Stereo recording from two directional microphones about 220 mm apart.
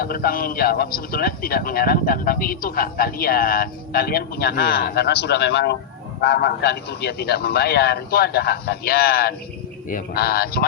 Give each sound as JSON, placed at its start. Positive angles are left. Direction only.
{"t": 0.0, "sound": "speech", "side_deg": 40}